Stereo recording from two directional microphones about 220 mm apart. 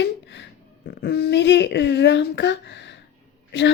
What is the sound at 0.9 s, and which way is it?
A woman's voice, 50° left (ahead or behind).